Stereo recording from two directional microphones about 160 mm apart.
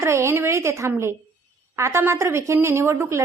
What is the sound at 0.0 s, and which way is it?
A woman's voice, 15° right (ahead or behind).